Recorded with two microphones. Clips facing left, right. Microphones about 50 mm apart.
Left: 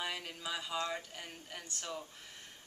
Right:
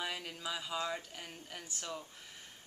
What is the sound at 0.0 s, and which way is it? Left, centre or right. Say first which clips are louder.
Speech: even; centre.